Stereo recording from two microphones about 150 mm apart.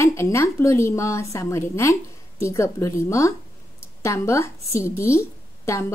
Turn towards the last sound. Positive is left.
turn(degrees=20)  # may be behind; listen again after turning